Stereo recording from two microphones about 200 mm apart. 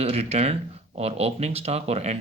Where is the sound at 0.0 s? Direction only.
30° right (ahead or behind).